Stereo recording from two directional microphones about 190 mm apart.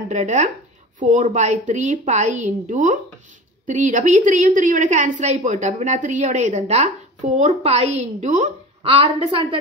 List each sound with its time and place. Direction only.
0.1 s a woman's voice: 35° right (ahead or behind)